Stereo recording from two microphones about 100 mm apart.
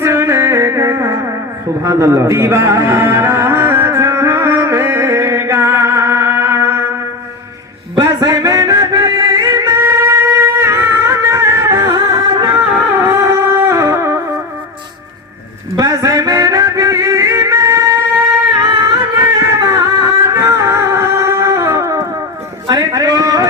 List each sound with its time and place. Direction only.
0.0 s music: 25° right (ahead or behind)
7.9 s music: 35° right (ahead or behind)
15.7 s music: 35° right (ahead or behind)
18.6 s a sound: 45° right (ahead or behind)
19.2 s music: 35° right (ahead or behind)
22.9 s a sound: 35° right (ahead or behind)